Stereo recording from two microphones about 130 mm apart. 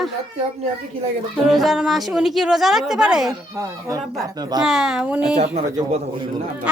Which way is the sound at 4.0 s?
Centre (ahead or behind).